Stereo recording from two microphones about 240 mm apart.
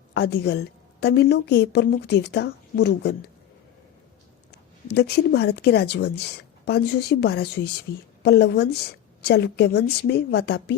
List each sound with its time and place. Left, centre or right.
0.1 s speech: left
4.5 s speech: left